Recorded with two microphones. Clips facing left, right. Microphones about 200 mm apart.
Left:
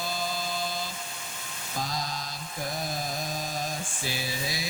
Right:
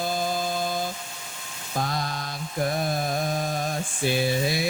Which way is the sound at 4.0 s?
60° right (ahead or behind).